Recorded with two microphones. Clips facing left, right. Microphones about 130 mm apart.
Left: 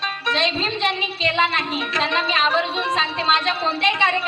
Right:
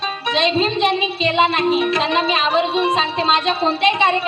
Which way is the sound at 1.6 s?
30° right (ahead or behind).